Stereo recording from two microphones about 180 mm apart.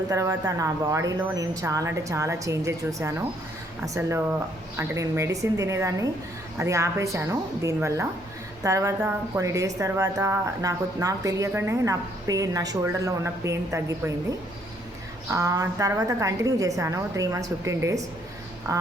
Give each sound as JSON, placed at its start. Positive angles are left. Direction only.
{"t": 0.1, "sound": "speech", "side_deg": -20}